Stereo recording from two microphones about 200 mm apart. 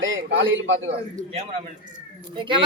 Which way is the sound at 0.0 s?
70° right (ahead or behind).